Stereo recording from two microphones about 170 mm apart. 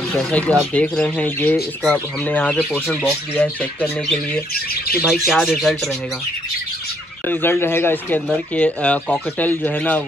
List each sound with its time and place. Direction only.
0.1 s speech: 5° left (ahead or behind)
5.0 s speech: centre (ahead or behind)
7.2 s speech: 15° left (ahead or behind)